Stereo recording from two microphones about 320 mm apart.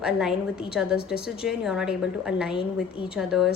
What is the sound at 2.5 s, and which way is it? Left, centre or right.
Speech, centre.